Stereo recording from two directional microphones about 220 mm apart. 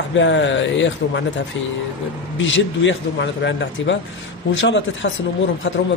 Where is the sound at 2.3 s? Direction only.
60° left (ahead or behind).